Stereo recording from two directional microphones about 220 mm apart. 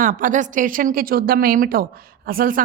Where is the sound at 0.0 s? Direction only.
35° right (ahead or behind).